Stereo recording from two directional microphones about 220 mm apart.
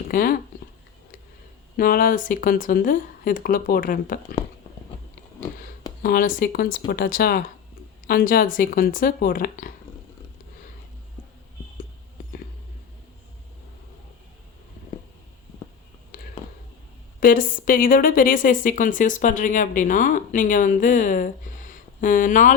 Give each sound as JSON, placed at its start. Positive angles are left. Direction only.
{"t": 0.1, "sound": "speech", "side_deg": 40}
{"t": 1.7, "sound": "a woman's voice", "side_deg": 40}
{"t": 6.0, "sound": "a woman's voice", "side_deg": 40}
{"t": 17.2, "sound": "a woman's voice", "side_deg": 40}